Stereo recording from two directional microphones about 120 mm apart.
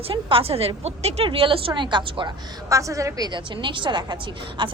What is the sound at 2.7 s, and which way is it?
A woman's voice, 25° right (ahead or behind).